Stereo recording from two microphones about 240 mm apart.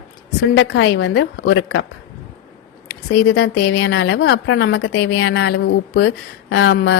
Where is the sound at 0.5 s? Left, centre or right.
Left.